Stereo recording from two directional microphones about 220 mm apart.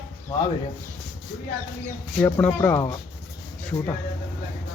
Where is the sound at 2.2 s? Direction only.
5° left (ahead or behind).